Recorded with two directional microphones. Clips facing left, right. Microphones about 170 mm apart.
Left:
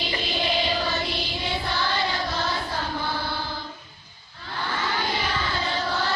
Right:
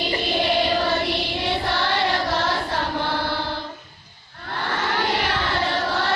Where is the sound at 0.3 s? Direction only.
55° right (ahead or behind); by 3.5 s 75° right (ahead or behind).